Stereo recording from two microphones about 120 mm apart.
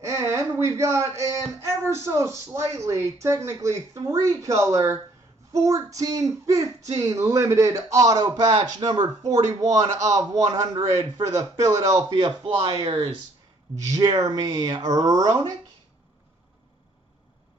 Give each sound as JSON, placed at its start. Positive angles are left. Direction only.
{"t": 0.0, "sound": "speech", "side_deg": -25}
{"t": 12.5, "sound": "speech", "side_deg": -50}
{"t": 13.9, "sound": "speech", "side_deg": -25}